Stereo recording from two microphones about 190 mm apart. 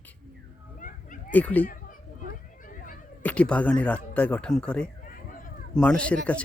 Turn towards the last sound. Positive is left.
turn(degrees=5)  # may be behind; listen again after turning